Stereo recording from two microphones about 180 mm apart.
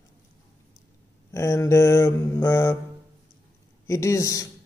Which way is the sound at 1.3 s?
15° left (ahead or behind).